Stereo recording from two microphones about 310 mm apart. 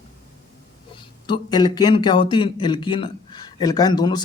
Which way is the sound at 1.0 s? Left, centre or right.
Centre.